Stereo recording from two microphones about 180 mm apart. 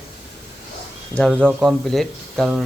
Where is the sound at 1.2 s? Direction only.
5° left (ahead or behind).